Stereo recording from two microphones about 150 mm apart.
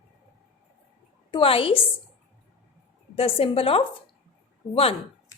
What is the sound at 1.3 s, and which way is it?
Speech, 35° left (ahead or behind).